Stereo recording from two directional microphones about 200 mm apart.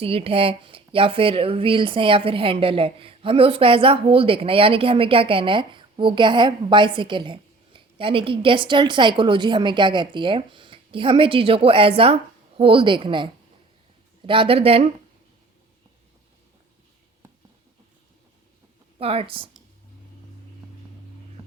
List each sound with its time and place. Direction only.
0.0 s a woman's voice: 30° right (ahead or behind)
18.9 s a woman's voice: 30° right (ahead or behind)